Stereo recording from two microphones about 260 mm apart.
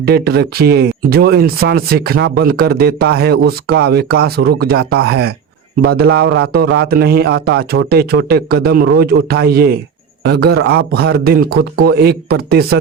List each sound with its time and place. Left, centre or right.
0.0 s speech: right